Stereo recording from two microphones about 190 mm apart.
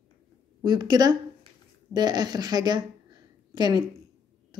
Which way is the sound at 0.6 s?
20° right (ahead or behind).